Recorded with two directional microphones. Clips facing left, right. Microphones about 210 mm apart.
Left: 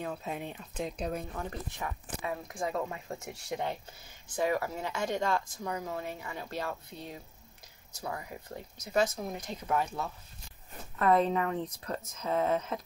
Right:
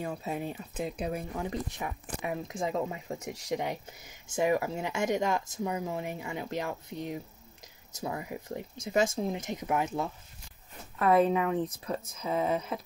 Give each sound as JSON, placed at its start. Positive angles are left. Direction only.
{"t": 0.0, "sound": "speech", "side_deg": -10}
{"t": 11.0, "sound": "speech", "side_deg": -5}